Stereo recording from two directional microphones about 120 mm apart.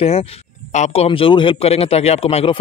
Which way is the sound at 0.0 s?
60° left (ahead or behind).